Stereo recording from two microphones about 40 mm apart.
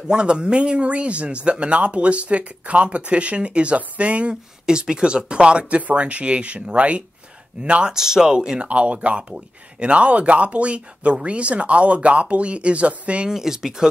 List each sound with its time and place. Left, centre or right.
0.1 s speech: right
4.6 s speech: right
5.8 s speech: right
7.9 s speech: centre
8.6 s speech: right
13.3 s speech: centre